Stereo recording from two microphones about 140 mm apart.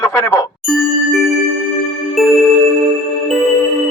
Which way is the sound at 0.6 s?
Centre (ahead or behind).